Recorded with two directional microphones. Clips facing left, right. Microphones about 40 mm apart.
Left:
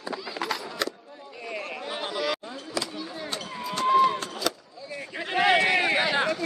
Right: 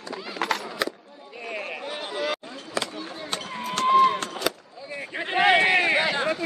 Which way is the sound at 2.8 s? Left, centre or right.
Right.